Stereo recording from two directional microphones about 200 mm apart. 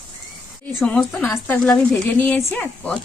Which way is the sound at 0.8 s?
5° left (ahead or behind).